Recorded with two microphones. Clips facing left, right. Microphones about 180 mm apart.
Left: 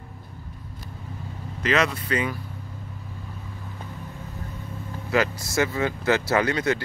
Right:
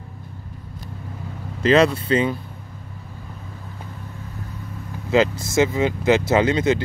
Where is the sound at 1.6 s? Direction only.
30° right (ahead or behind).